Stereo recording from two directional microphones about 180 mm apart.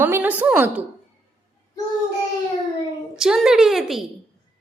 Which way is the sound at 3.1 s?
5° right (ahead or behind).